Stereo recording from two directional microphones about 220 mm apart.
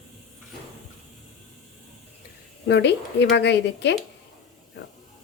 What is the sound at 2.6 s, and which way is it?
Speech, 50° left (ahead or behind).